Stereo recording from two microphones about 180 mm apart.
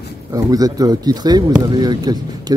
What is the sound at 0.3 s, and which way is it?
Speech, 20° right (ahead or behind).